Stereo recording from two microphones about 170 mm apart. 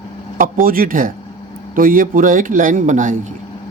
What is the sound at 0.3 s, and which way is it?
Speech, 55° right (ahead or behind).